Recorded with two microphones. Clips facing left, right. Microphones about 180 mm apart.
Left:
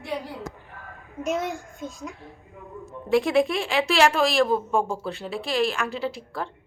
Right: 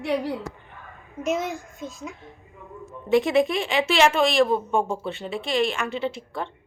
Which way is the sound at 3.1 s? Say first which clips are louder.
Right 1 dB; centre (ahead or behind).